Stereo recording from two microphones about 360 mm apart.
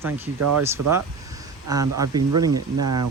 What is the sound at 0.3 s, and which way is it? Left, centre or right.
Speech, right.